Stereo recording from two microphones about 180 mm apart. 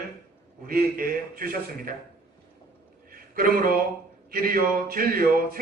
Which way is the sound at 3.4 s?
55° right (ahead or behind).